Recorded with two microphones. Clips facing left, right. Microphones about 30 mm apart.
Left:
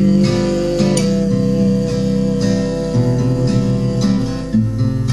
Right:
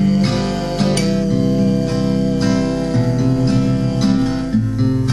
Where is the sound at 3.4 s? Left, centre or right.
Right.